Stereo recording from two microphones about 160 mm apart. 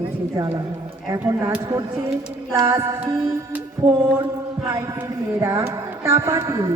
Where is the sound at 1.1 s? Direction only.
15° right (ahead or behind).